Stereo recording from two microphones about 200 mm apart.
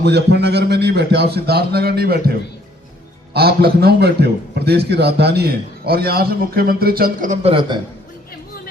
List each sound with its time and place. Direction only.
0.0 s a man's voice: 55° right (ahead or behind)
3.3 s a man's voice: 50° right (ahead or behind)
7.4 s a man's voice: 25° right (ahead or behind)